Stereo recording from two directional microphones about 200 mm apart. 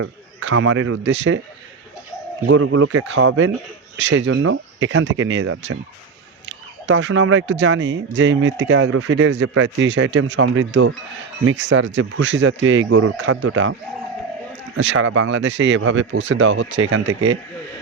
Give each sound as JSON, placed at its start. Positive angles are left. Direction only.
{"t": 0.0, "sound": "speech", "side_deg": -75}
{"t": 2.5, "sound": "speech", "side_deg": -85}
{"t": 14.8, "sound": "speech", "side_deg": -70}